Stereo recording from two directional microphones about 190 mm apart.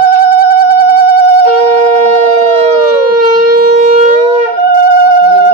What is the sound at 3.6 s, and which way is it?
Shofar, 45° right (ahead or behind).